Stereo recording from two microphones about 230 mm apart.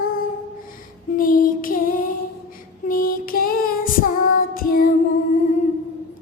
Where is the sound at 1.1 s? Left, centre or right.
Left.